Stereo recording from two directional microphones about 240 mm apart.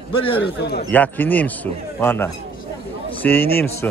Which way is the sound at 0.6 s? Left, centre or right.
Left.